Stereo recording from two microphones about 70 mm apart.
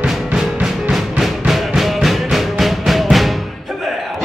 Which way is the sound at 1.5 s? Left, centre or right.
Centre.